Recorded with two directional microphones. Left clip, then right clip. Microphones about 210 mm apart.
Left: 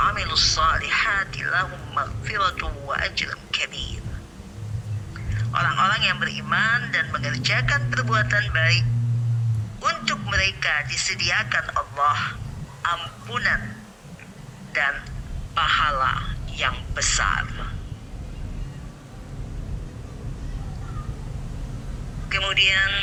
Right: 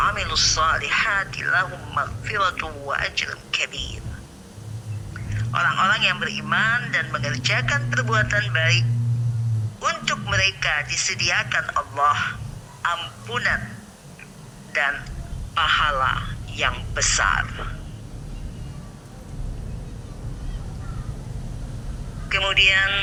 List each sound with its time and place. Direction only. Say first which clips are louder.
0.0 s a man's voice: even; 20° right (ahead or behind)
5.1 s a man's voice: right 1 dB; 25° right (ahead or behind)
14.7 s a man's voice: right 1 dB; 20° right (ahead or behind)
22.3 s a man's voice: right 2 dB; 25° right (ahead or behind)